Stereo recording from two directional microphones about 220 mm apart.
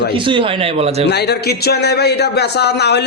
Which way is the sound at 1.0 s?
50° left (ahead or behind).